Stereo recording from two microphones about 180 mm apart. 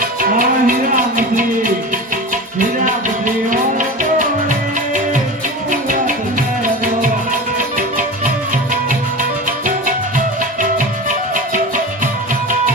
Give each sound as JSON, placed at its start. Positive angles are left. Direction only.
{"t": 0.0, "sound": "music", "side_deg": -50}
{"t": 5.7, "sound": "music", "side_deg": -45}
{"t": 7.8, "sound": "music", "side_deg": -45}
{"t": 10.6, "sound": "music", "side_deg": -45}